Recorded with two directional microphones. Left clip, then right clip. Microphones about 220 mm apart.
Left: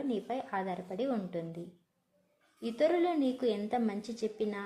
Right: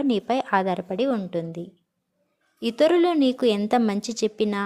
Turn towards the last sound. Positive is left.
turn(degrees=-35)  # may be behind; listen again after turning